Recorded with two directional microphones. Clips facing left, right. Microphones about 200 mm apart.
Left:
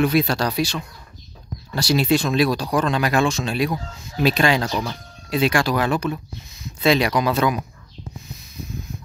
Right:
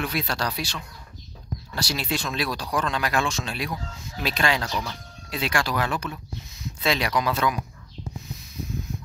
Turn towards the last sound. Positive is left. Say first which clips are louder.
# left 6 dB
turn(degrees=15)  # may be behind; listen again after turning